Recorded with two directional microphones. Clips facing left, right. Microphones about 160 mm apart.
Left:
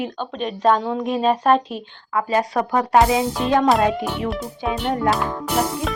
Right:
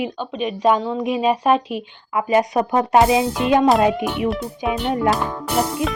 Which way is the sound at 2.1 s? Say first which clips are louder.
Right 3 dB; 20° right (ahead or behind).